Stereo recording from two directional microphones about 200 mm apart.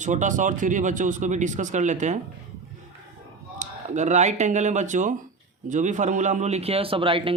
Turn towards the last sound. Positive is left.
turn(degrees=-25)  # may be behind; listen again after turning